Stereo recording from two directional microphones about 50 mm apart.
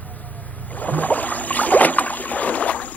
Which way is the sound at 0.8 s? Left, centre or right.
Left.